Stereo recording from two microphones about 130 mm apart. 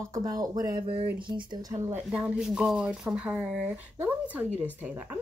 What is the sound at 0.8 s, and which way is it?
Speech, 45° right (ahead or behind).